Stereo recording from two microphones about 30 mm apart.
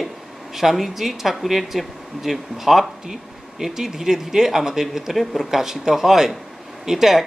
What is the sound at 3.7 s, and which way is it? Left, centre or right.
Speech, centre.